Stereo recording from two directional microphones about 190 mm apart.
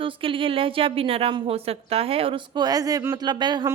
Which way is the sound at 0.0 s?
25° right (ahead or behind).